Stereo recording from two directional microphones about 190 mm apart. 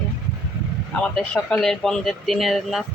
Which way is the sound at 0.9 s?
5° left (ahead or behind).